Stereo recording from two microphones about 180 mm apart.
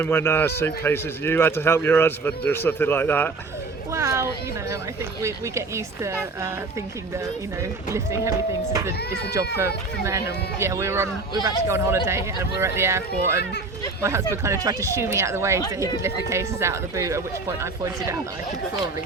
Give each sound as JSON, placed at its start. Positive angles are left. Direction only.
{"t": 0.0, "sound": "a man's voice", "side_deg": 15}
{"t": 3.9, "sound": "speech", "side_deg": -15}
{"t": 7.9, "sound": "speech", "side_deg": -15}